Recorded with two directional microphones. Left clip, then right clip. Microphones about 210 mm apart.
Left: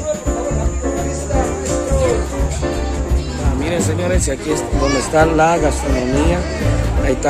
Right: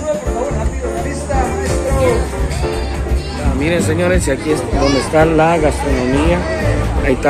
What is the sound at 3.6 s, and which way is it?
Speech, 5° left (ahead or behind).